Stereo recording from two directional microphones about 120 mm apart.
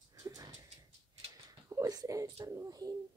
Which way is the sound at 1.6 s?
25° right (ahead or behind).